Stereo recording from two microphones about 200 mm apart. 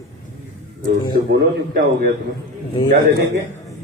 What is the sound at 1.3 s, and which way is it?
Speech, 50° right (ahead or behind).